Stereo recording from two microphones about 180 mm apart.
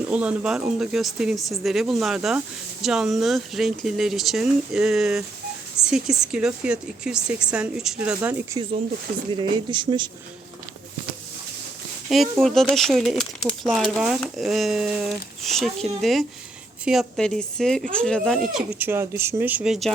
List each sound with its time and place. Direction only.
0.1 s speech: 5° right (ahead or behind)
9.3 s speech: 25° right (ahead or behind)
12.0 s speech: centre (ahead or behind)
18.5 s speech: 10° right (ahead or behind)